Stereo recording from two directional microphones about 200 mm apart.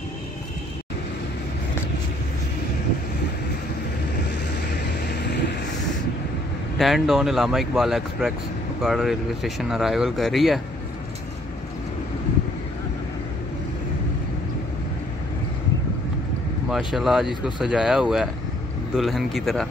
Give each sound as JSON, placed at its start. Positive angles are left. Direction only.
{"t": 5.0, "sound": "vehicle", "side_deg": 55}
{"t": 6.8, "sound": "speech", "side_deg": 0}
{"t": 16.7, "sound": "speech", "side_deg": 0}